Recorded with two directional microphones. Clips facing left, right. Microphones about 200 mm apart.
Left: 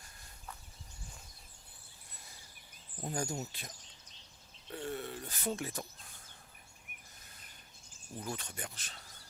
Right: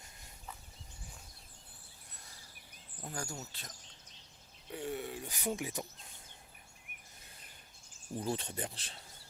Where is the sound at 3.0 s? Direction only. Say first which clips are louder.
Left 5 dB; 20° left (ahead or behind).